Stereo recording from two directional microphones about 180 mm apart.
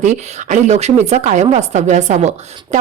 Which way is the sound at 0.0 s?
40° right (ahead or behind).